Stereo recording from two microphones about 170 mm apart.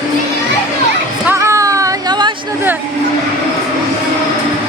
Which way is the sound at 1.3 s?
15° right (ahead or behind).